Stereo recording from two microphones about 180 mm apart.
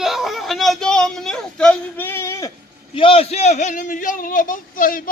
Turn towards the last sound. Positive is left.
turn(degrees=50)  # may be behind; listen again after turning